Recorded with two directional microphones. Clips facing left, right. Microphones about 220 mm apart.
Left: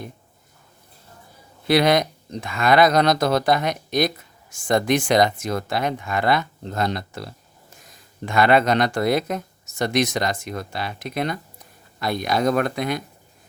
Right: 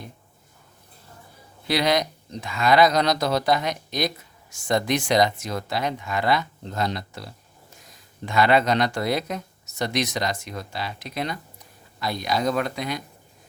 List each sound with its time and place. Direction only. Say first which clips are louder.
1.6 s speech: left 5 dB; 55° left (ahead or behind)